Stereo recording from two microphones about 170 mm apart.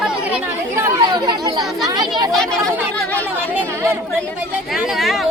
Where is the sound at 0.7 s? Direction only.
20° right (ahead or behind).